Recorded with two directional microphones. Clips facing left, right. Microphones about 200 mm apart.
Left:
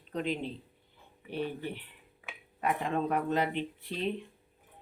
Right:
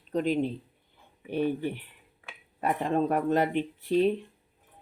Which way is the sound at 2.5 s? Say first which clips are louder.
Right 4 dB; 40° right (ahead or behind).